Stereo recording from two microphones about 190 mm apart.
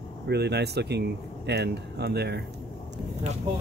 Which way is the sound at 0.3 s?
60° right (ahead or behind).